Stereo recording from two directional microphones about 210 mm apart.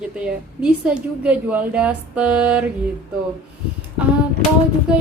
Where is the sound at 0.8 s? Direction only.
5° right (ahead or behind).